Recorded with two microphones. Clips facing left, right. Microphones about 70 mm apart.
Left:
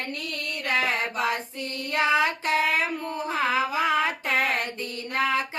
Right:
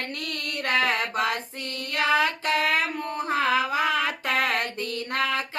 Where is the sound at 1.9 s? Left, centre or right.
Left.